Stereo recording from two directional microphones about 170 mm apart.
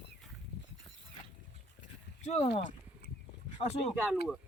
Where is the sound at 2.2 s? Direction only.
40° left (ahead or behind).